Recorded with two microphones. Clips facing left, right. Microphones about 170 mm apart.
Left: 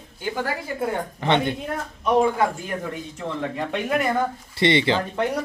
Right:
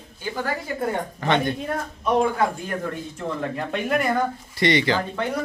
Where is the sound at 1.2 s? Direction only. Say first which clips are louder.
Left 1 dB; 20° left (ahead or behind).